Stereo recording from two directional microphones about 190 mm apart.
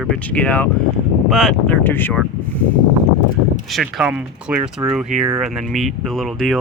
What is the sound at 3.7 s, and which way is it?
Speech, 5° right (ahead or behind).